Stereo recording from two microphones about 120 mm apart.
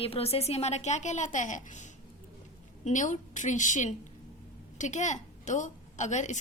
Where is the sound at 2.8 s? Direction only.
90° left.